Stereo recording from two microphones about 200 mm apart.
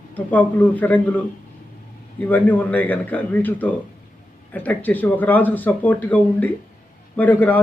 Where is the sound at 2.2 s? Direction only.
10° left (ahead or behind).